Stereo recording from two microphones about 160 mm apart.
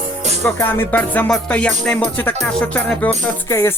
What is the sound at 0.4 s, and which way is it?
Music, 15° left (ahead or behind).